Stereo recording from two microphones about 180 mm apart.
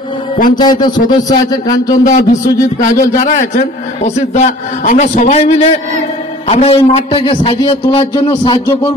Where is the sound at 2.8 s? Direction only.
45° left (ahead or behind); by 8.2 s 30° left (ahead or behind).